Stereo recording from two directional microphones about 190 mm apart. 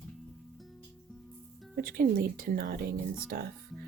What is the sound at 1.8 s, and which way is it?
Speech, 50° right (ahead or behind).